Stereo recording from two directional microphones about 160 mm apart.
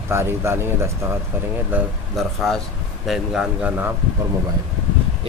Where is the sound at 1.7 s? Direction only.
Centre (ahead or behind).